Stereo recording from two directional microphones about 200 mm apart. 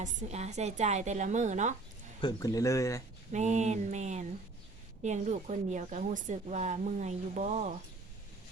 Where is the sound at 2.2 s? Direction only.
20° left (ahead or behind).